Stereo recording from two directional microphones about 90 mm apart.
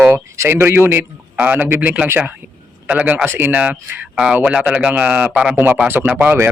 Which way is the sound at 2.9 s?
15° right (ahead or behind).